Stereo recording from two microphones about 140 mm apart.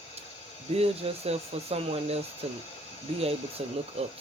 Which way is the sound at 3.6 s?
45° right (ahead or behind).